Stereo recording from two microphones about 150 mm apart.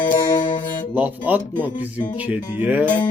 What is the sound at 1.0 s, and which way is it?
Speech, 10° right (ahead or behind).